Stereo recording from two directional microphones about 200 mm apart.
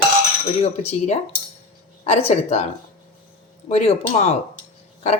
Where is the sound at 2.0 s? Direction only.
30° left (ahead or behind).